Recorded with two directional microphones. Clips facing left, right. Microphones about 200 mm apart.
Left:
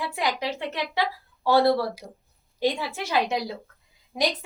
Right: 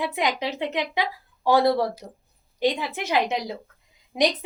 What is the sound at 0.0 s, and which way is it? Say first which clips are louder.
A woman's voice: right 2 dB; 20° right (ahead or behind).